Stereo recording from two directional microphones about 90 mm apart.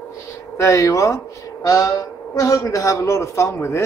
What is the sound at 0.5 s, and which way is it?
Speech, 35° left (ahead or behind).